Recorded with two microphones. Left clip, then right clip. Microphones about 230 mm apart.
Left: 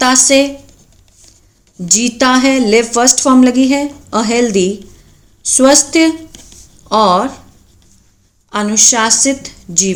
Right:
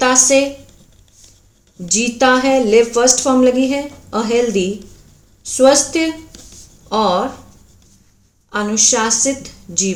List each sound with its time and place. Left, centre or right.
0.0 s speech: left
1.9 s a woman's voice: left
8.4 s a woman's voice: left